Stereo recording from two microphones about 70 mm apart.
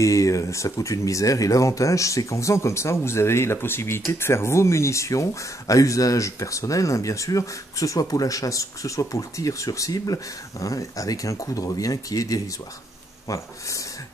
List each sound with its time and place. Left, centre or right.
0.0 s speech: left